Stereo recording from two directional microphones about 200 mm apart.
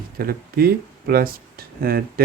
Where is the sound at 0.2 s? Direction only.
50° right (ahead or behind).